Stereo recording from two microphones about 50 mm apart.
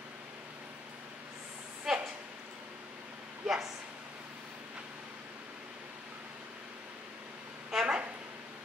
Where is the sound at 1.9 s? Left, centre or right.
Centre.